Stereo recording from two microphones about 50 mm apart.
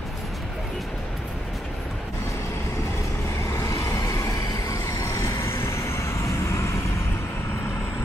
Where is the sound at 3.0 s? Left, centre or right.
Left.